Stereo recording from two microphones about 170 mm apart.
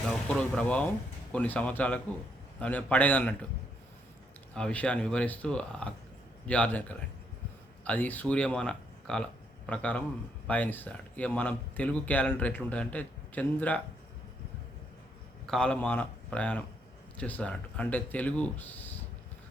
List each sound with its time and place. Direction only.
0.1 s speech: 5° left (ahead or behind)
4.5 s speech: 5° left (ahead or behind)
15.4 s speech: 5° left (ahead or behind)